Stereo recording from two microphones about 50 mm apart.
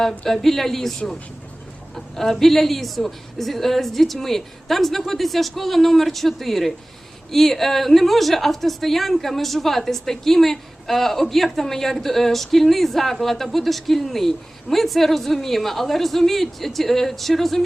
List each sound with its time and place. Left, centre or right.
0.3 s a woman's voice: centre